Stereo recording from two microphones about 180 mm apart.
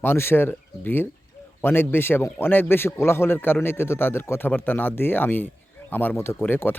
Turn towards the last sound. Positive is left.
turn(degrees=10)  # may be behind; listen again after turning